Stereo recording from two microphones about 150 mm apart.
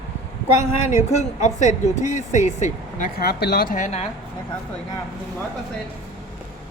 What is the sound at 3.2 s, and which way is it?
Speech, 90° left.